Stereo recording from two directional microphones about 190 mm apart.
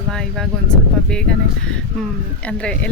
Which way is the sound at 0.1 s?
5° left (ahead or behind).